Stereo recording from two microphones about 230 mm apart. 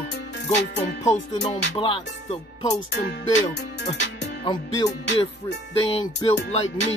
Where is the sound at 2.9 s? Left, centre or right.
Left.